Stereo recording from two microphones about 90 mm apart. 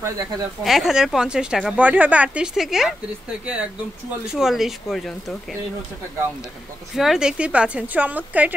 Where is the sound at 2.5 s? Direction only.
5° right (ahead or behind).